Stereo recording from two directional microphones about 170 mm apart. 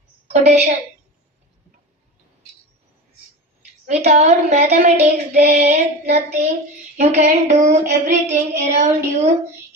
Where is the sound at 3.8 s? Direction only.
40° right (ahead or behind).